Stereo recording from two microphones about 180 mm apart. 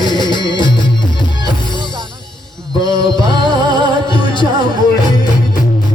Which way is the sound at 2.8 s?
25° left (ahead or behind).